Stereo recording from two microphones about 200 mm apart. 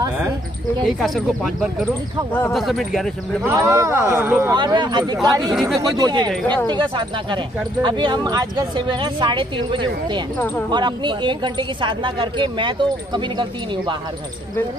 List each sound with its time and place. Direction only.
0.8 s speech: centre (ahead or behind)
3.7 s a woman's voice: 15° right (ahead or behind)
6.4 s speech: 10° left (ahead or behind)
6.7 s a woman's voice: 25° right (ahead or behind)